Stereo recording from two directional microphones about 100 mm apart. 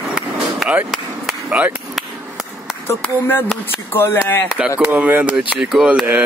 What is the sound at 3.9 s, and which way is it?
Speech, 20° left (ahead or behind).